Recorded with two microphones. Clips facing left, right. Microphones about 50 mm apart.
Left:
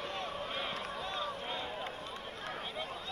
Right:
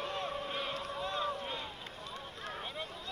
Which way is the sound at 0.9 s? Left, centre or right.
Right.